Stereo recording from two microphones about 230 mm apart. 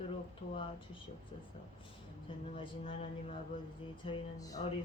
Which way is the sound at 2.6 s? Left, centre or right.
Left.